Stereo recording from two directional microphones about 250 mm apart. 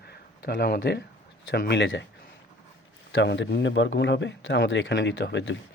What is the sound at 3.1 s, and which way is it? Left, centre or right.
Speech, left.